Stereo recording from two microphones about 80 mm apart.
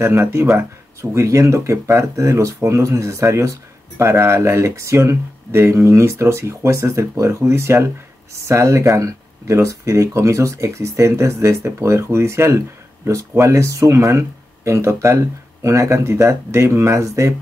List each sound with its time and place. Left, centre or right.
0.0 s speech: right